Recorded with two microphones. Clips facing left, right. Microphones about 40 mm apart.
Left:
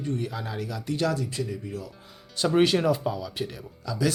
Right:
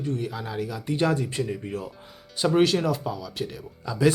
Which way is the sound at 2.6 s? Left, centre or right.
Centre.